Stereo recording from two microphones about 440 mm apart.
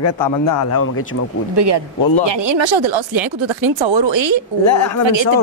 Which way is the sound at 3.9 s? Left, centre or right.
Right.